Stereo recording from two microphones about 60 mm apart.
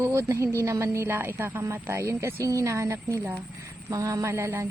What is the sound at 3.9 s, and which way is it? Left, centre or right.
Speech, right.